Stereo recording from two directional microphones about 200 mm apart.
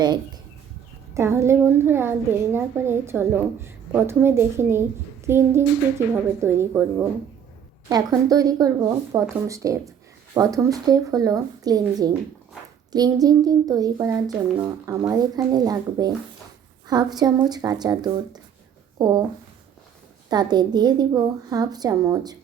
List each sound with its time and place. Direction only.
1.1 s a woman's voice: 15° right (ahead or behind)
20.3 s a woman's voice: 20° right (ahead or behind)